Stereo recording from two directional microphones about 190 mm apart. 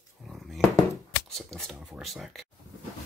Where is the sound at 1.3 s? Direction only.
Centre (ahead or behind).